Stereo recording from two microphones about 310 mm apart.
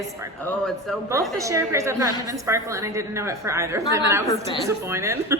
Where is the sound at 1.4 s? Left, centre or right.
Centre.